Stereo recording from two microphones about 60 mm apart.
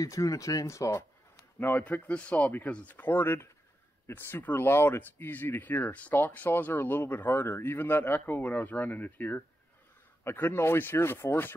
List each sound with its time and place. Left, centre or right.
0.0 s speech: left
1.6 s speech: left
10.2 s speech: left